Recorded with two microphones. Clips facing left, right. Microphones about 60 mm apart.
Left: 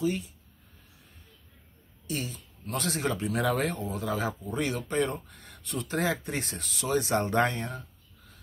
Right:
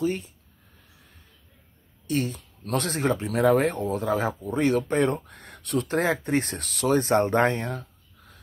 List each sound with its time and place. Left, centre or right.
0.0 s speech: right
2.0 s speech: right
4.8 s speech: right
5.9 s speech: right